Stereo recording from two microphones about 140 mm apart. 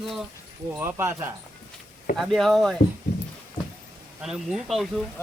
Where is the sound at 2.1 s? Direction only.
Centre (ahead or behind).